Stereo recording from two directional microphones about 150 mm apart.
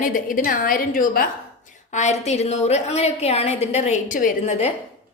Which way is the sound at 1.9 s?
50° left (ahead or behind).